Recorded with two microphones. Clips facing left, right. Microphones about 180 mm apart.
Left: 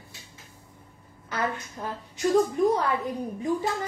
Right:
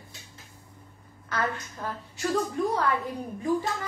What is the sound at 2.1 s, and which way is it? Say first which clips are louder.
Speech: left 6 dB; 20° left (ahead or behind).